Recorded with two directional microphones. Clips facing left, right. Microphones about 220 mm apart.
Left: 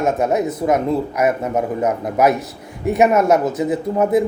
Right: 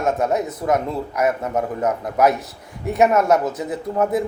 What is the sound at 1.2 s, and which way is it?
Speech, 20° left (ahead or behind).